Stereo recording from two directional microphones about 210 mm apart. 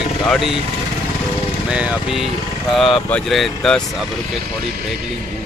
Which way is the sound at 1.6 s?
5° right (ahead or behind).